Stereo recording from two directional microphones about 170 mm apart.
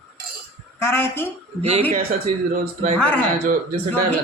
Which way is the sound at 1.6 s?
35° right (ahead or behind).